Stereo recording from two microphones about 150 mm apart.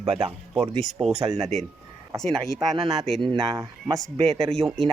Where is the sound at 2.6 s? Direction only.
30° right (ahead or behind).